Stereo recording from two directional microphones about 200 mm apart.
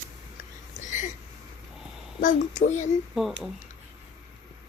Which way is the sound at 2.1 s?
40° left (ahead or behind).